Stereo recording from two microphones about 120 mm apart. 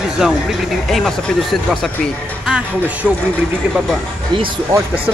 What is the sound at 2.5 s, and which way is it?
Speech, 10° right (ahead or behind).